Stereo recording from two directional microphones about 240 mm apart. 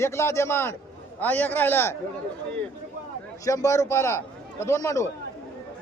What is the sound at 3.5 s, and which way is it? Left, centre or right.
A man's voice, centre.